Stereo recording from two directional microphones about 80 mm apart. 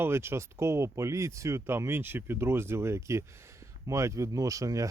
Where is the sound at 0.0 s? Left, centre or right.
Right.